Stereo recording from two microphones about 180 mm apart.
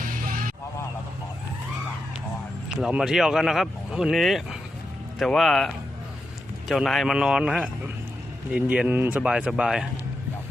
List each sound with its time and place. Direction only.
0.0 s music: 50° right (ahead or behind)
2.6 s speech: 5° right (ahead or behind)